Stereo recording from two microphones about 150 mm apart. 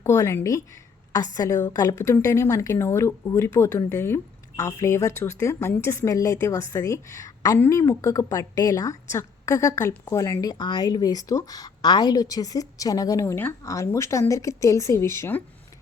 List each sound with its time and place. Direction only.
0.0 s a woman's voice: 20° left (ahead or behind)